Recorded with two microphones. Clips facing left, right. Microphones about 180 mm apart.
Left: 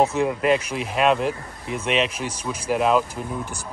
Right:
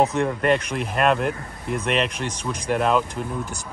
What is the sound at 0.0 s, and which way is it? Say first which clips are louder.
Speech: even; 5° left (ahead or behind).